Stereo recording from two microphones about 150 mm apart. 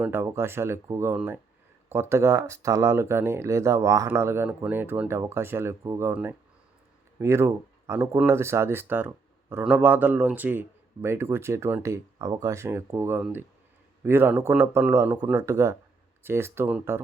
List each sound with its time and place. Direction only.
0.0 s speech: 15° right (ahead or behind)